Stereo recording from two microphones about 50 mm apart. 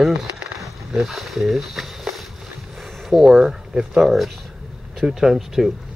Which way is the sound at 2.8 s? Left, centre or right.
Centre.